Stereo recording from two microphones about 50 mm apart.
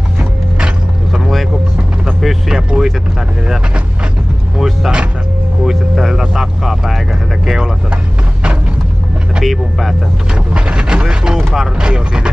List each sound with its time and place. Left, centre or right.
2.2 s speech: centre
4.6 s speech: centre
9.4 s speech: centre
10.3 s speech: centre